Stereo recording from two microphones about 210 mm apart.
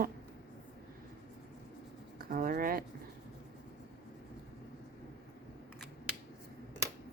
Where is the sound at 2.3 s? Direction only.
40° right (ahead or behind).